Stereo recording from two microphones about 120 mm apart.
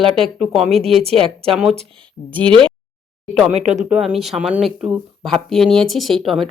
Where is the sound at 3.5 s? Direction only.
70° right (ahead or behind).